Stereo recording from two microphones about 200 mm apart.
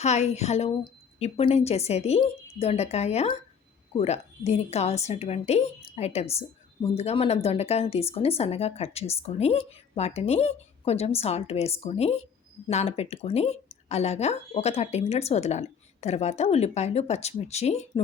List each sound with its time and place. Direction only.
0.0 s speech: 35° left (ahead or behind)